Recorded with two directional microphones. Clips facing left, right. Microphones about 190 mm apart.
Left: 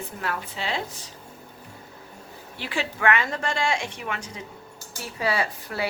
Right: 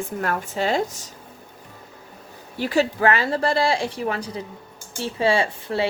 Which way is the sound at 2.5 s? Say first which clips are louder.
Right 10 dB; 40° right (ahead or behind).